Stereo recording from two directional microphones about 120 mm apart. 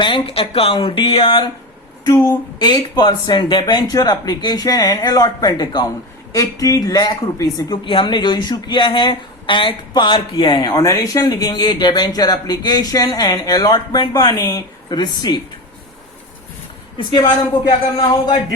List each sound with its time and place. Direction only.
0.0 s speech: 45° left (ahead or behind)
2.0 s a man's voice: 25° left (ahead or behind)
2.6 s a man's voice: 35° left (ahead or behind)
7.9 s speech: 40° left (ahead or behind)
17.1 s speech: 45° left (ahead or behind)